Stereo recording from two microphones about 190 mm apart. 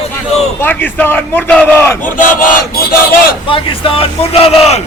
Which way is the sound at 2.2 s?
45° left (ahead or behind).